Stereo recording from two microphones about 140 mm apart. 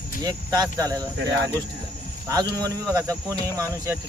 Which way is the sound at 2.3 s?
30° right (ahead or behind).